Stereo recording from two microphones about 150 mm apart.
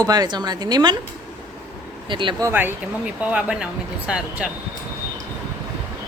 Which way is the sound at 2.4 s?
15° right (ahead or behind).